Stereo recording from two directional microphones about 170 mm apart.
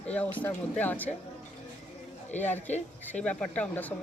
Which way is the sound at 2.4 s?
10° left (ahead or behind).